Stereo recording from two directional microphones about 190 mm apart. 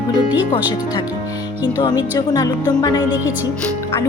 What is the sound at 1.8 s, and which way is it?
Speech, 25° left (ahead or behind).